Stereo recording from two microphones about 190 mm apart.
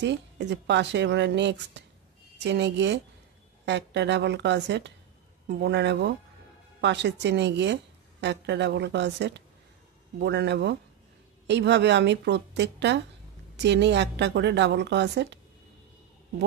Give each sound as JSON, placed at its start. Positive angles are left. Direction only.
{"t": 0.0, "sound": "a woman's voice", "side_deg": -65}